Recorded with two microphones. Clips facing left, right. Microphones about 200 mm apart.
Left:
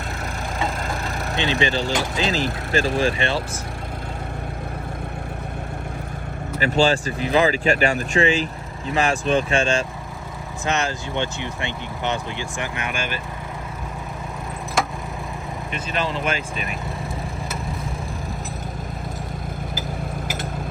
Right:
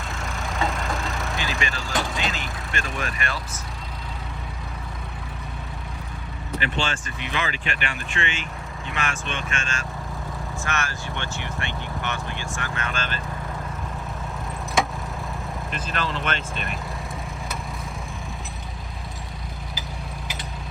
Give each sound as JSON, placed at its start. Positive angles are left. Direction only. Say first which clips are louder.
{"t": 0.9, "sound": "vehicle", "louder": "left 1 dB", "side_deg": 0}
{"t": 1.3, "sound": "speech", "louder": "left 7 dB", "side_deg": 30}
{"t": 6.6, "sound": "speech", "louder": "left 10 dB", "side_deg": 40}
{"t": 10.7, "sound": "speech", "louder": "left 7 dB", "side_deg": 20}
{"t": 14.8, "sound": "a sound", "louder": "even", "side_deg": 0}
{"t": 15.7, "sound": "speech", "louder": "left 4 dB", "side_deg": 0}